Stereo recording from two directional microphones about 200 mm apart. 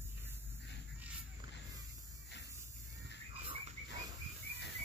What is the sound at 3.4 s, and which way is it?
Frog, 25° right (ahead or behind).